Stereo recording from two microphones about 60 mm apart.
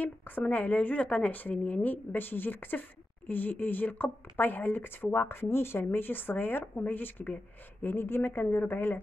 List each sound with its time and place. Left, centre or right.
0.0 s a woman's voice: left